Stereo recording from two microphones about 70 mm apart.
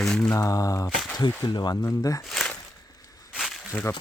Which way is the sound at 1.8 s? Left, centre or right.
Left.